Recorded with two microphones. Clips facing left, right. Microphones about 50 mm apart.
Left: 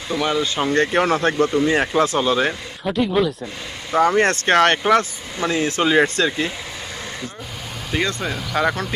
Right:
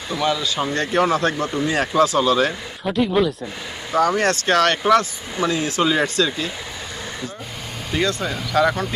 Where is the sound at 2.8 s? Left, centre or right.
Centre.